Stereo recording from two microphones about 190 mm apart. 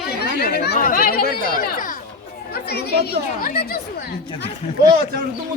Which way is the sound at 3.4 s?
55° left (ahead or behind).